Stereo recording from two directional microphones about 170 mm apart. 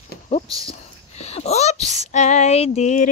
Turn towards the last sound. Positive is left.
turn(degrees=45)  # may be behind; listen again after turning